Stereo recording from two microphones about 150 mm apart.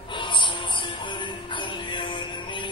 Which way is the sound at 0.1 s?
35° left (ahead or behind).